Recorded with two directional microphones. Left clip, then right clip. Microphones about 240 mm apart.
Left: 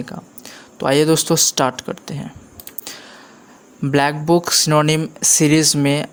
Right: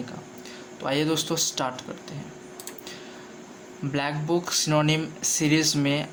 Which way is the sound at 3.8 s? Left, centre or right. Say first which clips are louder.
Left 11 dB; left.